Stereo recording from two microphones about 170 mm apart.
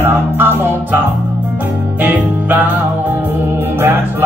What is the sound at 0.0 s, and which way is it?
Music, 15° right (ahead or behind).